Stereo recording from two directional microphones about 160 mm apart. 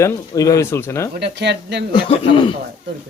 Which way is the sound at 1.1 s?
90° right.